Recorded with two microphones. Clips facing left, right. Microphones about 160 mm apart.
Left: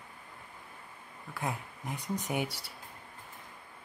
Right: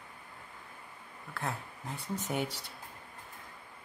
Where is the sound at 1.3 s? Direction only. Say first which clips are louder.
Left 1 dB; 15° left (ahead or behind).